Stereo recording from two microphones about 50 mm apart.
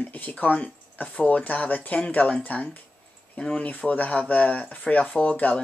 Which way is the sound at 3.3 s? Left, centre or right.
Centre.